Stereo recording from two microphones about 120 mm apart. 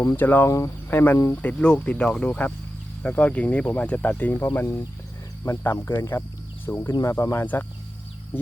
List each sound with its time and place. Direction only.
0.2 s speech: 15° left (ahead or behind)